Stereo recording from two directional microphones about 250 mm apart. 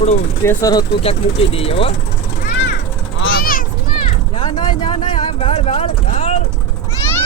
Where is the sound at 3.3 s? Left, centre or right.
Left.